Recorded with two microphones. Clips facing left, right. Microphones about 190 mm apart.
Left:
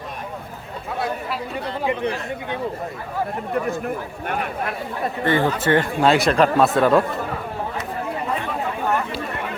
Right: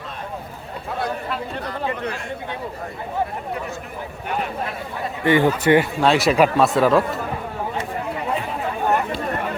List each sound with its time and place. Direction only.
0.9 s chatter: 5° left (ahead or behind)
1.8 s speech: 15° left (ahead or behind)
3.7 s speech: 55° left (ahead or behind)
5.2 s a man's voice: 15° right (ahead or behind)